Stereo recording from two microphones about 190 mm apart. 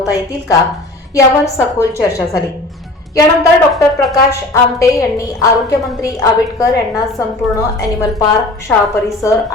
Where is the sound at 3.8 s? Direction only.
15° left (ahead or behind).